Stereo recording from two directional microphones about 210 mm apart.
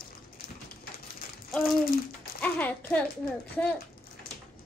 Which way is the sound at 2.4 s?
10° left (ahead or behind).